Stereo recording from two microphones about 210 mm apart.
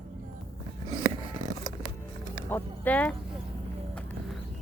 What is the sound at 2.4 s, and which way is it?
Speech, 10° left (ahead or behind).